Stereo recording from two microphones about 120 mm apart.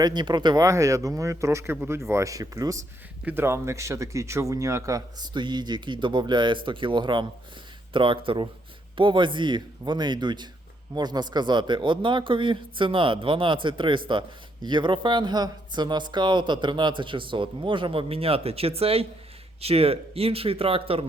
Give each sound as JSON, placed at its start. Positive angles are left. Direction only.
{"t": 0.0, "sound": "speech", "side_deg": -35}
{"t": 5.4, "sound": "speech", "side_deg": -40}